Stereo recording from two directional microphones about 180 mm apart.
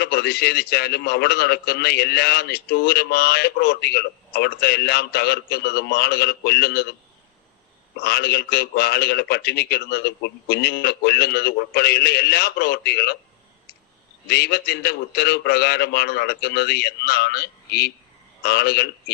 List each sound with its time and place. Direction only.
0.0 s a man's voice: 65° left (ahead or behind)
8.0 s a man's voice: 65° left (ahead or behind)
14.3 s a man's voice: 65° left (ahead or behind)